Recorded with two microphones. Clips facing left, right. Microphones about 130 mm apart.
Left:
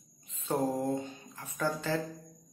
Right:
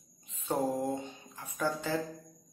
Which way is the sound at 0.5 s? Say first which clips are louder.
Left 1 dB; 15° right (ahead or behind).